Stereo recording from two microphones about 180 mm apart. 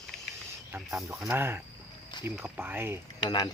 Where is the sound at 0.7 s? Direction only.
5° right (ahead or behind).